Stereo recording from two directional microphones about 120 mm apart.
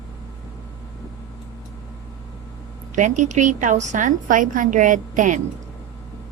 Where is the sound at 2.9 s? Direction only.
90° right.